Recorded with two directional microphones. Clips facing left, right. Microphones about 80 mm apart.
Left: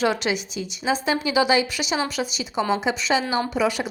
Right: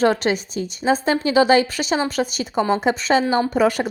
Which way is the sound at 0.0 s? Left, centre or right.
Right.